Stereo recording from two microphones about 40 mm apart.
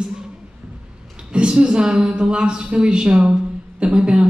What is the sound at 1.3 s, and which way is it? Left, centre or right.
A woman's voice, right.